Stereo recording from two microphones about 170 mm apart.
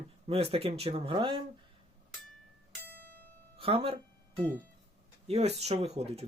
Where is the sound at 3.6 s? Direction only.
35° right (ahead or behind).